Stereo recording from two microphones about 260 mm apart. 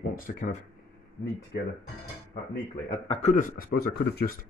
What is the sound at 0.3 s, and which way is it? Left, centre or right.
Speech, left.